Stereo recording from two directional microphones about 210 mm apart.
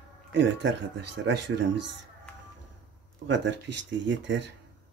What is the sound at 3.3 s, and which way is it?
Speech, 60° right (ahead or behind).